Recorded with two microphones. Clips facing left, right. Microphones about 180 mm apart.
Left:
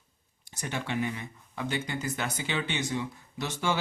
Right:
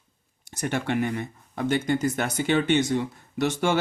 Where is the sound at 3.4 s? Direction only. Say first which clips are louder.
Right 7 dB; 60° right (ahead or behind).